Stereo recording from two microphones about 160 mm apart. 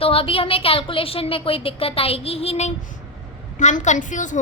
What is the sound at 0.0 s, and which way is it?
A woman's voice, 35° left (ahead or behind).